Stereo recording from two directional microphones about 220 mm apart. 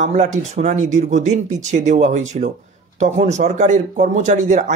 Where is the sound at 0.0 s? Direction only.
30° right (ahead or behind).